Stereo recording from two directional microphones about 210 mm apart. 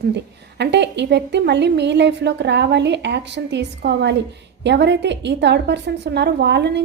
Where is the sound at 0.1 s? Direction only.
55° right (ahead or behind).